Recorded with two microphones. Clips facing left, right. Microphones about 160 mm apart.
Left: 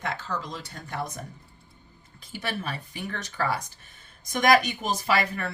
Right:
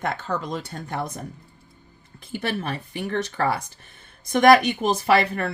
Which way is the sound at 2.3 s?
55° right (ahead or behind).